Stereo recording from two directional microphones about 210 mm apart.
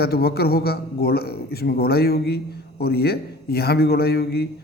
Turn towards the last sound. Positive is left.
turn(degrees=50)  # may be behind; listen again after turning